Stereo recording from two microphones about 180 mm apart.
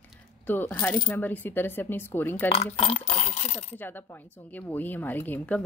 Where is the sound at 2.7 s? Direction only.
35° left (ahead or behind).